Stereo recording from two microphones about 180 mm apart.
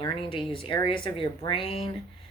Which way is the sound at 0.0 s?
30° left (ahead or behind).